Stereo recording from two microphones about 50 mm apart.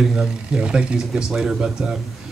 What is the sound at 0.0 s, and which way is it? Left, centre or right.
Speech, centre.